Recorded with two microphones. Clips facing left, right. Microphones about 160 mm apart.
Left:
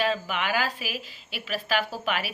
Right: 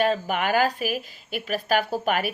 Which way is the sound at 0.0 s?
45° right (ahead or behind).